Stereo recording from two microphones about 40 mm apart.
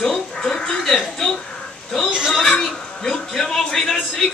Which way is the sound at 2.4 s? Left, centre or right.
Centre.